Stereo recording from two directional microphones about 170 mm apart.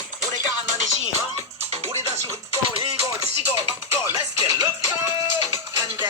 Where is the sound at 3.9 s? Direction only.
20° right (ahead or behind).